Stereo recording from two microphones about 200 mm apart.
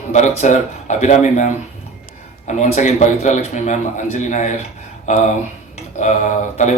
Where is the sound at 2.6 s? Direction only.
35° left (ahead or behind).